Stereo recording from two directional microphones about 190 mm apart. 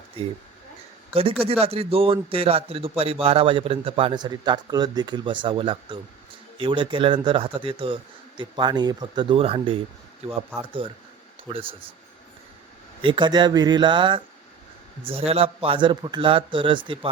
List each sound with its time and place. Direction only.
1.1 s a man's voice: 30° right (ahead or behind)
13.0 s a man's voice: 25° right (ahead or behind)